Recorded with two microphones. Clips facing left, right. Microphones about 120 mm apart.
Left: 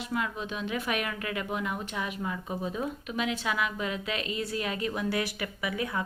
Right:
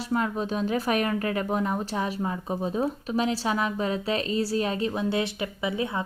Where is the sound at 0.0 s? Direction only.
35° right (ahead or behind).